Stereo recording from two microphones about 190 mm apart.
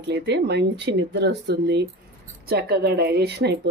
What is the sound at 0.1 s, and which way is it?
Speech, 65° right (ahead or behind).